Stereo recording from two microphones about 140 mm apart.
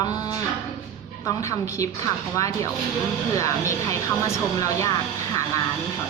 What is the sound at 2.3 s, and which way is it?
Speech, 25° left (ahead or behind).